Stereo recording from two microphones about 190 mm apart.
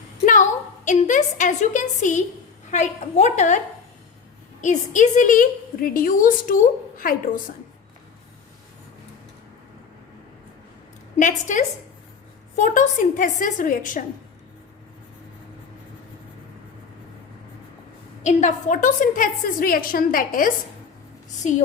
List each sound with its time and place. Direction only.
0.9 s a woman's voice: 40° left (ahead or behind)
4.6 s a woman's voice: 40° left (ahead or behind)
11.2 s a woman's voice: 40° left (ahead or behind)
18.2 s a woman's voice: 40° left (ahead or behind)